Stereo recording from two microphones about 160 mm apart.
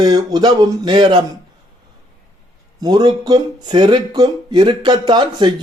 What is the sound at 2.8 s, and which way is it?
A man's voice, 25° right (ahead or behind).